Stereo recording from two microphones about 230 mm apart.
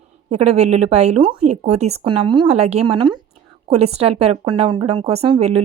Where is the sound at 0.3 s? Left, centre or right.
Right.